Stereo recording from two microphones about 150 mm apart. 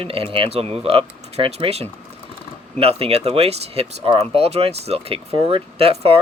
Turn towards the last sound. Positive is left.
turn(degrees=-40)  # may be behind; listen again after turning